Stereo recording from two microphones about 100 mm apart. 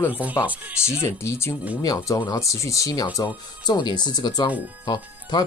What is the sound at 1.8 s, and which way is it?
Speech, 40° left (ahead or behind).